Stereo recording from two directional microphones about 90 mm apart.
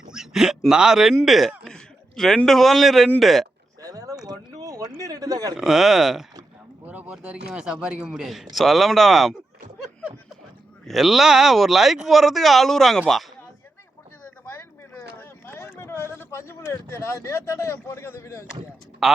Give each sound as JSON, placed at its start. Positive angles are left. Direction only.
{"t": 0.1, "sound": "speech", "side_deg": -5}
{"t": 3.8, "sound": "a sound", "side_deg": -40}
{"t": 4.3, "sound": "speech", "side_deg": -40}
{"t": 5.5, "sound": "speech", "side_deg": -5}
{"t": 6.8, "sound": "speech", "side_deg": -15}
{"t": 10.8, "sound": "speech", "side_deg": 0}
{"t": 14.9, "sound": "a sound", "side_deg": 25}
{"t": 19.0, "sound": "speech", "side_deg": 0}